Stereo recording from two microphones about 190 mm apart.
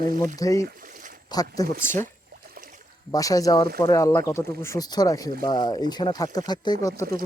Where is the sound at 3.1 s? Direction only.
20° left (ahead or behind).